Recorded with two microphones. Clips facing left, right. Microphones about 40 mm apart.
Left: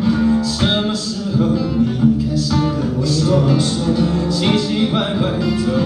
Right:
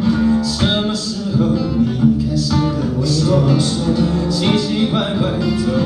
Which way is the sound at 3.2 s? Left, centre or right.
Centre.